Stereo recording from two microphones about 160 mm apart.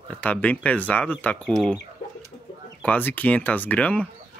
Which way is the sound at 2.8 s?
10° left (ahead or behind).